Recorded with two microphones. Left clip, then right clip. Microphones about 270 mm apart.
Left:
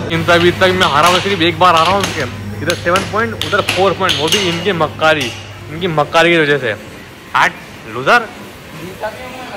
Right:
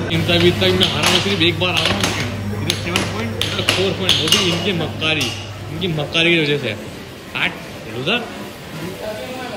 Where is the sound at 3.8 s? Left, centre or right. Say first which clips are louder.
Left 5 dB; centre.